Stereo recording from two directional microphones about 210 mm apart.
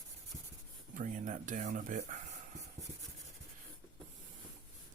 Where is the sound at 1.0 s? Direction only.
40° right (ahead or behind).